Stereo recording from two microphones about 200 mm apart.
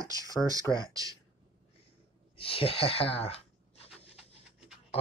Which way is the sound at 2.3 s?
30° left (ahead or behind).